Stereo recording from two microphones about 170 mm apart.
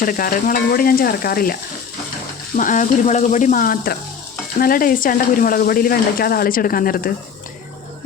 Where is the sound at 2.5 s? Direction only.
50° left (ahead or behind).